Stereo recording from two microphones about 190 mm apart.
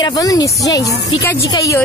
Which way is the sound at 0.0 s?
20° left (ahead or behind).